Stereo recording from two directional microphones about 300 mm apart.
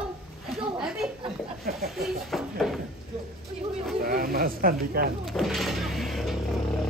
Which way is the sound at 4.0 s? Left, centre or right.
Right.